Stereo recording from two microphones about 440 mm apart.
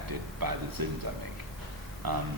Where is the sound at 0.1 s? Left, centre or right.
Right.